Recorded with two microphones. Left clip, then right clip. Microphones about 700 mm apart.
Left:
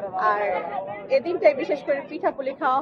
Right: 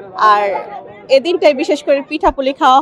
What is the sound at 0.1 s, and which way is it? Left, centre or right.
A woman's voice, right.